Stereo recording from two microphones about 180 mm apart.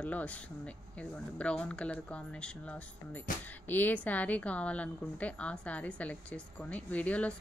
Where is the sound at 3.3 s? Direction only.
50° left (ahead or behind).